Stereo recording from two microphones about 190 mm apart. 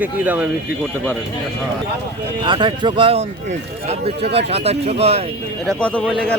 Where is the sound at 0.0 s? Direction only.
10° right (ahead or behind).